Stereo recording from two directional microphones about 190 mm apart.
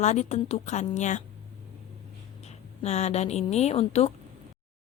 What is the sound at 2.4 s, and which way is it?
A woman's voice, 35° left (ahead or behind).